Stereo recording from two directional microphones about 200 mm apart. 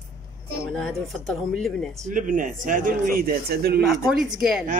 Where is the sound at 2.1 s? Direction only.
40° right (ahead or behind).